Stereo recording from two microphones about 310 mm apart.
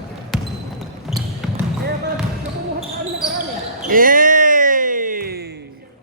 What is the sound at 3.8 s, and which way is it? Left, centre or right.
Music, right.